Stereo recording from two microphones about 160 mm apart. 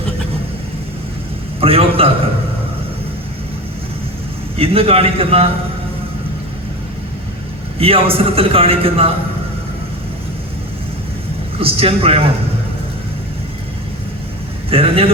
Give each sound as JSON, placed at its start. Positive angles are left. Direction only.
{"t": 1.6, "sound": "a man's voice", "side_deg": -35}
{"t": 4.5, "sound": "a man's voice", "side_deg": -35}
{"t": 7.8, "sound": "a man's voice", "side_deg": -35}
{"t": 11.6, "sound": "a man's voice", "side_deg": -35}
{"t": 14.7, "sound": "a man's voice", "side_deg": -35}